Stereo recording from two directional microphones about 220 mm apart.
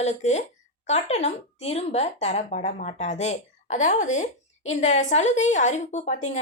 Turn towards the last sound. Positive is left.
turn(degrees=30)  # may be behind; listen again after turning